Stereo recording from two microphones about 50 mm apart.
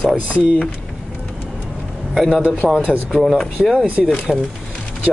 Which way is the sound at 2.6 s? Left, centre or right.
Centre.